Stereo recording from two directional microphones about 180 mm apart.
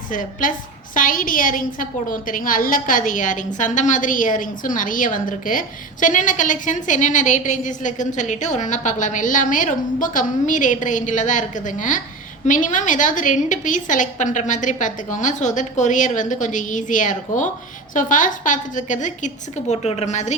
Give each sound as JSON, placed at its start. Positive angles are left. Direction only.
{"t": 0.1, "sound": "a woman's voice", "side_deg": 45}